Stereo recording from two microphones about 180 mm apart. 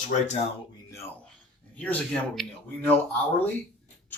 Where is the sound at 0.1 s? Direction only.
45° left (ahead or behind).